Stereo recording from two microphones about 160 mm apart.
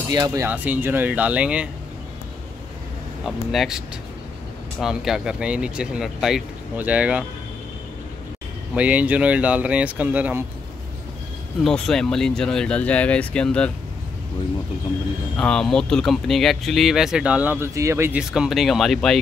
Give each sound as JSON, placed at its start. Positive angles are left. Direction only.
{"t": 0.1, "sound": "speech", "side_deg": -20}
{"t": 3.3, "sound": "speech", "side_deg": -5}
{"t": 8.7, "sound": "speech", "side_deg": -10}
{"t": 11.6, "sound": "speech", "side_deg": 5}
{"t": 15.3, "sound": "speech", "side_deg": 5}
{"t": 18.3, "sound": "speech", "side_deg": 0}